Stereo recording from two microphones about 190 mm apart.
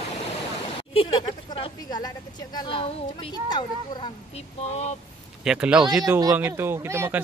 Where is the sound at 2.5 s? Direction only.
25° left (ahead or behind).